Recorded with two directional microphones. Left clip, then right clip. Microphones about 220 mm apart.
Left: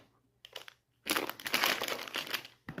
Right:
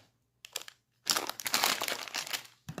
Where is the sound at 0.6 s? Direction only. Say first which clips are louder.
Right 3 dB; 5° right (ahead or behind).